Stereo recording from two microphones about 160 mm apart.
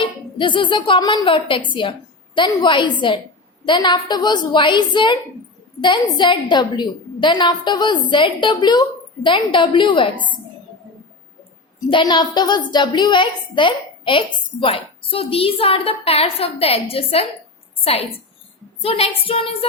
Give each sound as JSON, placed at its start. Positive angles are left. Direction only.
{"t": 0.0, "sound": "a woman's voice", "side_deg": 30}
{"t": 11.9, "sound": "a woman's voice", "side_deg": 30}